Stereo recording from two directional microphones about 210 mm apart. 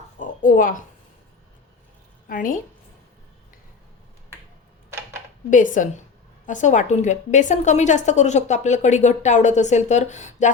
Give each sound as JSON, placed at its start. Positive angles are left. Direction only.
{"t": 0.2, "sound": "speech", "side_deg": 40}
{"t": 2.3, "sound": "a woman's voice", "side_deg": 40}
{"t": 5.5, "sound": "a woman's voice", "side_deg": 40}